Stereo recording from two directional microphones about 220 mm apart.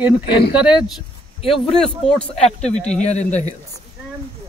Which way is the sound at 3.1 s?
30° left (ahead or behind).